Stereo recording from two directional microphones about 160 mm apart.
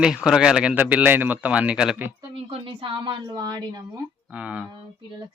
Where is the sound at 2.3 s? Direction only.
35° right (ahead or behind).